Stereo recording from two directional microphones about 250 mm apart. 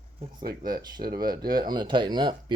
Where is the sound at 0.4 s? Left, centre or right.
Right.